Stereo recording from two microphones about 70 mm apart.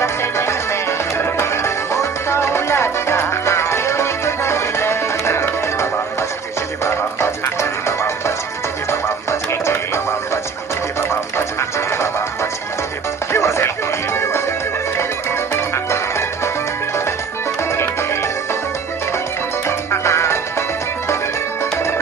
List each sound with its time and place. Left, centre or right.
0.0 s music: left
6.8 s music: left
13.3 s music: left
15.5 s music: left
19.9 s music: left